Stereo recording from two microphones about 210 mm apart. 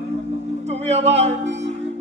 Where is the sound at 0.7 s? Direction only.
30° right (ahead or behind).